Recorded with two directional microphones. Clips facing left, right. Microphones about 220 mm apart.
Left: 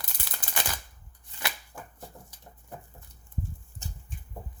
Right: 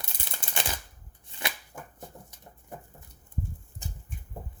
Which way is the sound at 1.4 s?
25° right (ahead or behind).